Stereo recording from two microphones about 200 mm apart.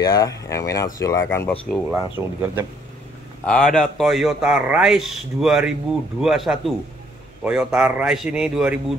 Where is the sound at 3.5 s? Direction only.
5° left (ahead or behind).